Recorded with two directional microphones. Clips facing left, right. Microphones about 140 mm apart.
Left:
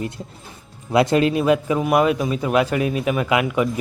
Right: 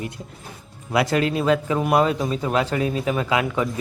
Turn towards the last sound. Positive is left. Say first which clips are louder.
# left 3 dB
turn(degrees=15)  # may be behind; listen again after turning